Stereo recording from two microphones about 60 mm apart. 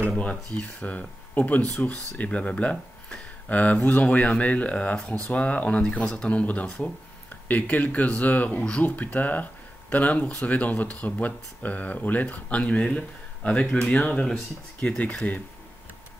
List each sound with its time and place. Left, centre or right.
0.2 s speech: left